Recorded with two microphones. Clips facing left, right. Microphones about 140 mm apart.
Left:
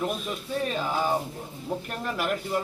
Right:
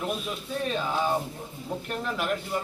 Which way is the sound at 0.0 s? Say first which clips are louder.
Left 1 dB; centre (ahead or behind).